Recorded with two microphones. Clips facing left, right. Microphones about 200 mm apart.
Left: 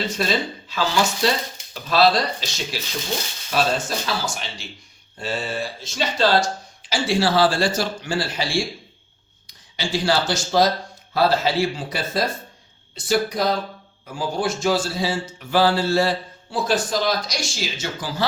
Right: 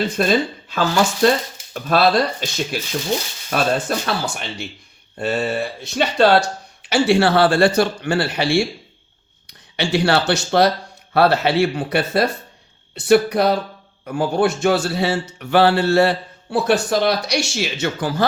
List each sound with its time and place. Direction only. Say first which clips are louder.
0.1 s a man's voice: right 5 dB; 55° right (ahead or behind)